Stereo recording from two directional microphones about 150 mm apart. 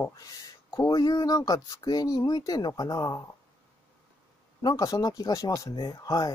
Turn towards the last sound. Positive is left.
turn(degrees=25)  # may be behind; listen again after turning